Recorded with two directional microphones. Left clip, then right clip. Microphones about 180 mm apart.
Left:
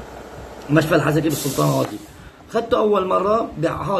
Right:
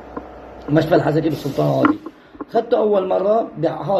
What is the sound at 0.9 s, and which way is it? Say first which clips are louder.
Speech: right 4 dB; 10° left (ahead or behind).